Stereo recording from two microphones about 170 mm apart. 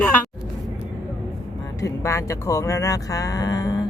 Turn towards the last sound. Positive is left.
turn(degrees=20)  # may be behind; listen again after turning